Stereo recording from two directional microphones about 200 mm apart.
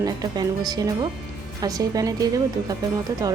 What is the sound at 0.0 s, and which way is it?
A woman's voice, 20° right (ahead or behind).